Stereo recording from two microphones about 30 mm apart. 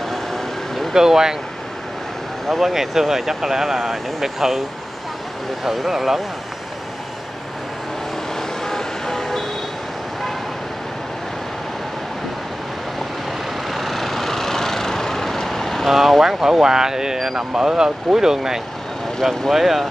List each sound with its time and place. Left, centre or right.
0.1 s vehicle: centre
0.9 s speech: centre
2.4 s speech: centre
2.7 s speech: centre
8.4 s vehicle: centre
13.7 s vehicle: centre
15.9 s speech: centre
16.3 s speech: centre